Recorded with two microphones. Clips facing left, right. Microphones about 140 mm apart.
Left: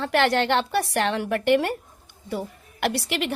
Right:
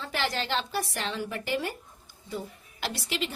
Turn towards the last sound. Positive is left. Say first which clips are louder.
# left 7 dB
turn(degrees=65)  # may be behind; listen again after turning